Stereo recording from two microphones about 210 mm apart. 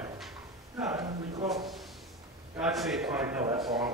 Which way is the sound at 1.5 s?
Centre (ahead or behind).